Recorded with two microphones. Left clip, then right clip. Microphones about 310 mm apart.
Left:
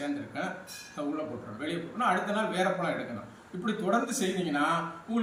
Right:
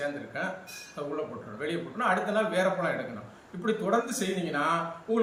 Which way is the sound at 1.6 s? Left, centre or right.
Centre.